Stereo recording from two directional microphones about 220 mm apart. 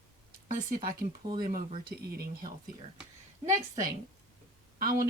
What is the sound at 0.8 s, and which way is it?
Speech, 40° right (ahead or behind).